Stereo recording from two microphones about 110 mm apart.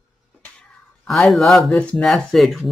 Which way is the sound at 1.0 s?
Centre (ahead or behind).